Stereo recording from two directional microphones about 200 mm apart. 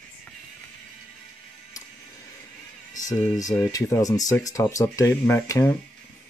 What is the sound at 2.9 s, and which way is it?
Speech, 15° left (ahead or behind).